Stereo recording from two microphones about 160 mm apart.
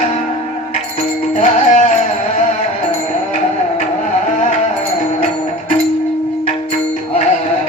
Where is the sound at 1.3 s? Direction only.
50° left (ahead or behind).